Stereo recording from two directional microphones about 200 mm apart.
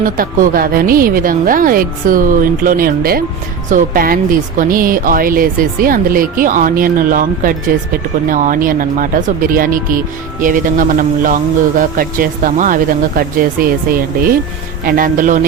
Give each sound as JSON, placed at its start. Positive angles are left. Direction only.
{"t": 0.0, "sound": "speech", "side_deg": -45}
{"t": 14.8, "sound": "speech", "side_deg": -45}